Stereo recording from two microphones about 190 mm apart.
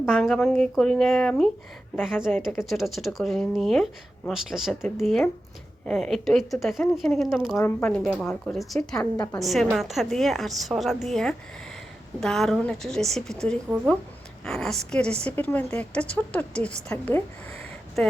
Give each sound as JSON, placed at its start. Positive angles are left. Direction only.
{"t": 0.1, "sound": "speech", "side_deg": 0}
{"t": 7.5, "sound": "a woman's voice", "side_deg": 10}
{"t": 9.1, "sound": "a woman's voice", "side_deg": 20}
{"t": 9.4, "sound": "a woman's voice", "side_deg": 0}